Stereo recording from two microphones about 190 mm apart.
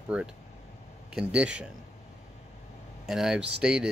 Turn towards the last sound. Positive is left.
turn(degrees=-5)  # may be behind; listen again after turning